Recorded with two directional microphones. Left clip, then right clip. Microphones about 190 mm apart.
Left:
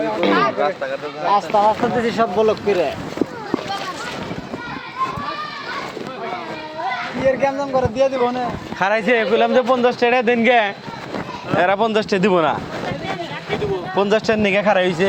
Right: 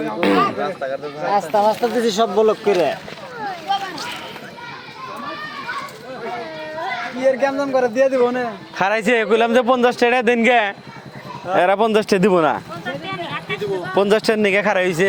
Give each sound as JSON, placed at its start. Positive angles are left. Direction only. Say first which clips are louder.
{"t": 0.2, "sound": "a man's voice", "louder": "right 2 dB", "side_deg": -55}
{"t": 1.3, "sound": "speech", "louder": "left 1 dB", "side_deg": -25}
{"t": 2.0, "sound": "speech", "louder": "right 2 dB", "side_deg": -50}
{"t": 7.6, "sound": "a man's voice", "louder": "right 1 dB", "side_deg": -40}
{"t": 8.8, "sound": "a man's voice", "louder": "even", "side_deg": -60}
{"t": 13.9, "sound": "a man's voice", "louder": "right 1 dB", "side_deg": -55}